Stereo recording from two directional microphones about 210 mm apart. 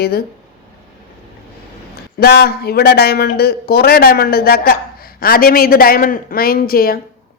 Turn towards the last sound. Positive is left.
turn(degrees=45)  # may be behind; listen again after turning